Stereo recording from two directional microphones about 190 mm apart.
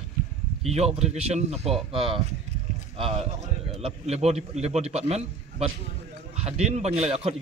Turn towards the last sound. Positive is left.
turn(degrees=-35)  # may be behind; listen again after turning